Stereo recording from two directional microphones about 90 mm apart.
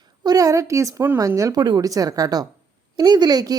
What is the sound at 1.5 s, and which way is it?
Speech, 55° right (ahead or behind).